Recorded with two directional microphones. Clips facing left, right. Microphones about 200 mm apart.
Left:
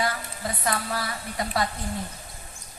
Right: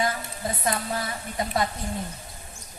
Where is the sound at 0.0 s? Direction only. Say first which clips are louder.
Right 1 dB; 20° right (ahead or behind).